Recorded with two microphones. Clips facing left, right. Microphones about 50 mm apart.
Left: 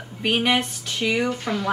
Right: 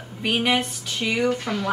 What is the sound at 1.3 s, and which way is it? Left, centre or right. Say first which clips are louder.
Speech: right 1 dB; centre.